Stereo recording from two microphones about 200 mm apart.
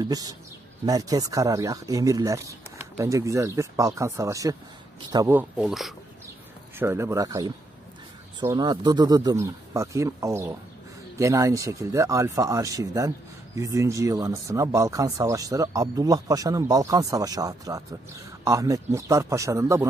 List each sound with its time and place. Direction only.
0.0 s a man's voice: 20° right (ahead or behind); by 5.9 s centre (ahead or behind)
6.8 s speech: 10° right (ahead or behind)